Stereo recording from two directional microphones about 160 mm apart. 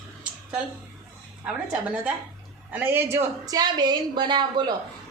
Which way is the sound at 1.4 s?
5° right (ahead or behind).